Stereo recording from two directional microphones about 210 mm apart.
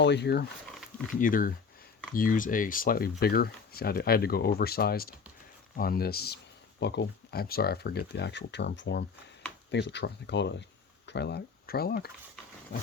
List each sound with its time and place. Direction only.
0.0 s speech: 55° left (ahead or behind)
1.2 s speech: 40° left (ahead or behind)